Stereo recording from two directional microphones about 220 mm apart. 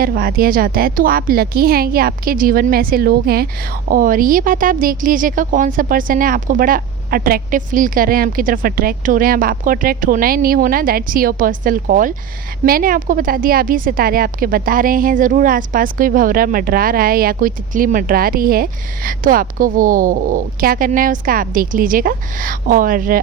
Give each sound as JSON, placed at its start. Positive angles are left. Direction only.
{"t": 0.0, "sound": "a woman's voice", "side_deg": -45}